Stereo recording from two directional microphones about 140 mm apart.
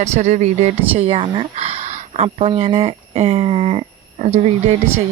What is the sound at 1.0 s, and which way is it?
A woman's voice, 40° right (ahead or behind).